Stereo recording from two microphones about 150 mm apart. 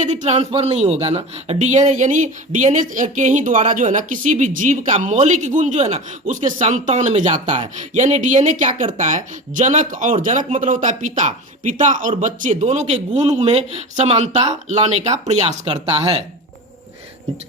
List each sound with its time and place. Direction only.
0.0 s speech: 55° right (ahead or behind)